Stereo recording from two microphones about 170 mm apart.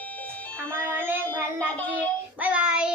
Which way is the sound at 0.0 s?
10° left (ahead or behind).